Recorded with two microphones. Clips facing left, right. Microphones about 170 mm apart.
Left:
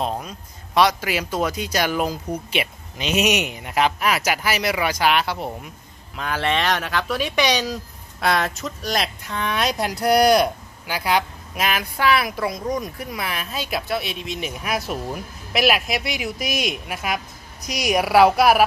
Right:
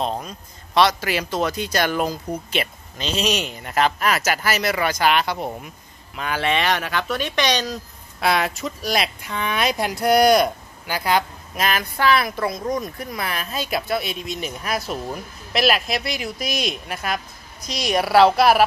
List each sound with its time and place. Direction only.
0.0 s speech: 5° left (ahead or behind)